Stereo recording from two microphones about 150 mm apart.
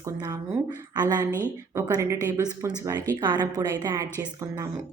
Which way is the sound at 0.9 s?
25° right (ahead or behind).